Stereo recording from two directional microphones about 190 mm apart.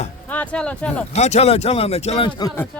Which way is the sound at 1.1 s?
35° left (ahead or behind).